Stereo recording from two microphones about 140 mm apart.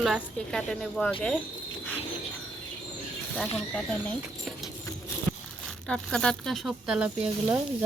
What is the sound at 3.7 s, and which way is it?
Speech, 10° left (ahead or behind).